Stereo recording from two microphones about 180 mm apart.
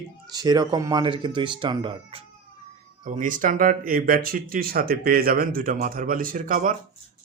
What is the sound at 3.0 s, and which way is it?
Speech, 45° right (ahead or behind).